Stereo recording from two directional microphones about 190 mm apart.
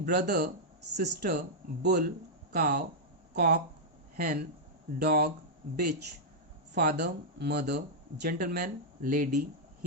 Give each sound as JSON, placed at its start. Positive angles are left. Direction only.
{"t": 0.0, "sound": "speech", "side_deg": -55}
{"t": 6.7, "sound": "speech", "side_deg": -55}